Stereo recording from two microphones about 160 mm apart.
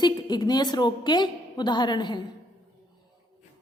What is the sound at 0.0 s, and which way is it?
A woman's voice, 25° left (ahead or behind).